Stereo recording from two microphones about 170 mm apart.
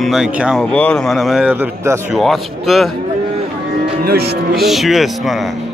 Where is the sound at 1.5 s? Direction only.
15° right (ahead or behind).